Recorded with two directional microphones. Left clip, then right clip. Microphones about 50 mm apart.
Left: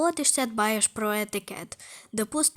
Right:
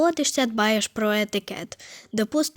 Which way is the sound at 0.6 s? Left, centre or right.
Right.